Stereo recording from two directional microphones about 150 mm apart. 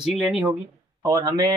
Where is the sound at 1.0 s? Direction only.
25° right (ahead or behind).